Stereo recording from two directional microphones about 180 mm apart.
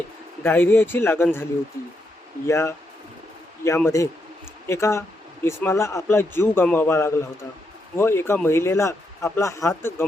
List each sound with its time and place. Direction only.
0.4 s speech: 10° left (ahead or behind)
2.5 s speech: 15° left (ahead or behind)